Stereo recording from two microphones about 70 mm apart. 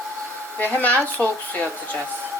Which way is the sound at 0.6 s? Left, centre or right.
Left.